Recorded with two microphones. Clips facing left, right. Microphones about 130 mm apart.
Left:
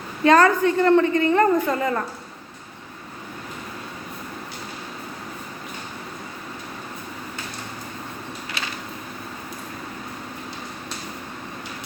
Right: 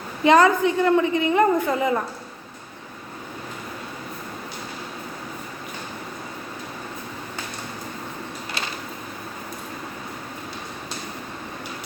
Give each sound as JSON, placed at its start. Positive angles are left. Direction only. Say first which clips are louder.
{"t": 0.3, "sound": "a woman's voice", "louder": "even", "side_deg": -15}